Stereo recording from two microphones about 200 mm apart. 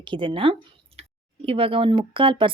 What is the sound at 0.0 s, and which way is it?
A woman's voice, 25° right (ahead or behind).